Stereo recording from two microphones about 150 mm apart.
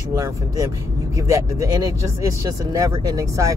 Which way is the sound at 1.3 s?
20° right (ahead or behind).